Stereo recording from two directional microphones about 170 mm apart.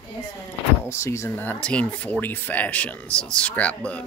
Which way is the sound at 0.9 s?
15° left (ahead or behind).